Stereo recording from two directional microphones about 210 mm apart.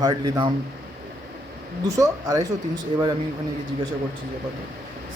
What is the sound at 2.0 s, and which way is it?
Speech, 15° right (ahead or behind).